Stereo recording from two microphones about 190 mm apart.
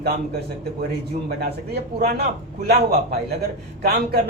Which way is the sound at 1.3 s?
55° right (ahead or behind).